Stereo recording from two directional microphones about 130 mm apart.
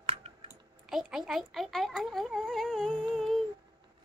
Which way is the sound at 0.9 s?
5° right (ahead or behind).